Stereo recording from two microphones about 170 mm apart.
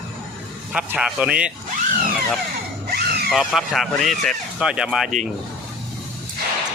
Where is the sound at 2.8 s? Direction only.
65° right (ahead or behind).